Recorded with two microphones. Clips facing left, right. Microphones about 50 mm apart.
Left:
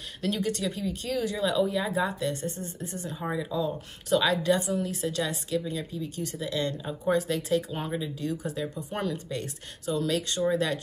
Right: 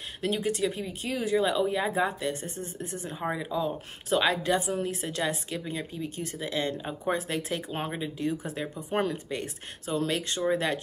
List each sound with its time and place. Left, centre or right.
0.2 s speech: centre